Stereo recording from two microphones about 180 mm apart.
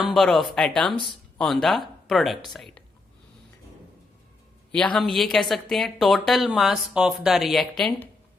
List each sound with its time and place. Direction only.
0.0 s a woman's voice: centre (ahead or behind)
4.7 s a woman's voice: 5° left (ahead or behind)